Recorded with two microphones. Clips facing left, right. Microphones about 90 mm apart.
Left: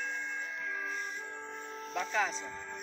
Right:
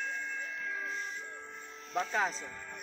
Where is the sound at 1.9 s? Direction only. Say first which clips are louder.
Right 1 dB; 35° right (ahead or behind).